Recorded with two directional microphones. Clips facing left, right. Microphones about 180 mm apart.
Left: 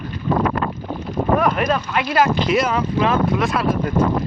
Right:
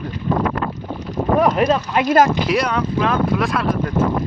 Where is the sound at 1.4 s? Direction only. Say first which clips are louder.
Right 3 dB; 25° right (ahead or behind).